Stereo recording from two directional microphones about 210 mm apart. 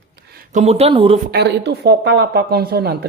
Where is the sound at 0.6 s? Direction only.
30° right (ahead or behind).